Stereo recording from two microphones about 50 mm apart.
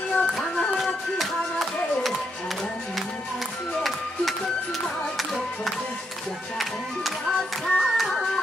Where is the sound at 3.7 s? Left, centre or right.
Centre.